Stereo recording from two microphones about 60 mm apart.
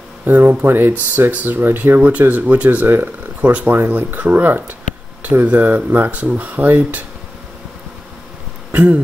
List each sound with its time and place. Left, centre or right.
0.3 s speech: right
8.7 s insect: right